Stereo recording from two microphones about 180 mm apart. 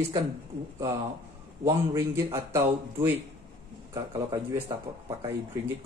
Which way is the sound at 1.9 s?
15° right (ahead or behind).